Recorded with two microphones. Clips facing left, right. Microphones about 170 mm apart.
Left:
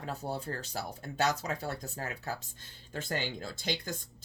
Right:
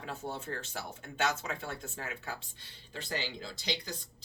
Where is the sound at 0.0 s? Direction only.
40° left (ahead or behind).